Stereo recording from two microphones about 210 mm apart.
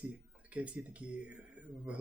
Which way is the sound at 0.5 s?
5° right (ahead or behind).